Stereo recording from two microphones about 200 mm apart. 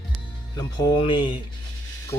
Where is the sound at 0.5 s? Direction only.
20° left (ahead or behind).